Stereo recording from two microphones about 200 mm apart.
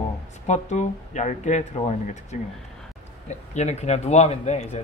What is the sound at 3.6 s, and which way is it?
Speech, 35° left (ahead or behind).